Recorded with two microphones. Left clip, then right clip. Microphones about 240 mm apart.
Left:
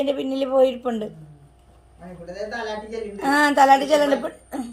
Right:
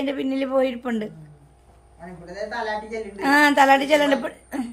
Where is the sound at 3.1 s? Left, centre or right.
Right.